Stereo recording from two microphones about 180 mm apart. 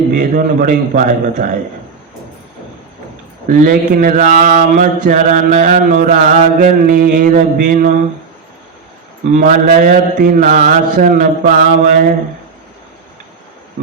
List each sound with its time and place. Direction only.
0.1 s mantra: 55° right (ahead or behind)
3.4 s mantra: 50° right (ahead or behind)
9.3 s mantra: 50° right (ahead or behind)